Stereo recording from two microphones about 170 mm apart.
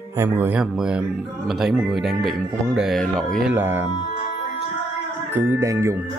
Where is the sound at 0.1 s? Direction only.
15° right (ahead or behind); by 3.3 s 5° left (ahead or behind).